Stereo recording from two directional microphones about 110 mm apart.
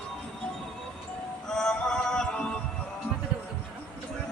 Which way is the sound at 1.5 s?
5° left (ahead or behind).